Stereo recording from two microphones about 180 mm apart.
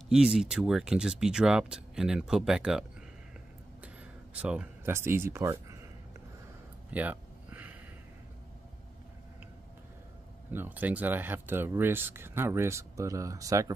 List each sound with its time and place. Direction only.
0.1 s speech: centre (ahead or behind)
4.4 s speech: 5° right (ahead or behind)
6.9 s a sound: 10° right (ahead or behind)
10.5 s speech: 10° right (ahead or behind)